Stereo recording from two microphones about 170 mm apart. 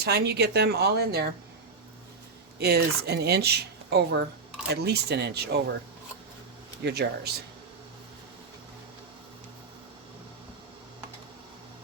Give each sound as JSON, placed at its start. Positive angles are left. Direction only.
{"t": 0.0, "sound": "speech", "side_deg": -70}
{"t": 2.6, "sound": "speech", "side_deg": -70}
{"t": 6.8, "sound": "speech", "side_deg": -75}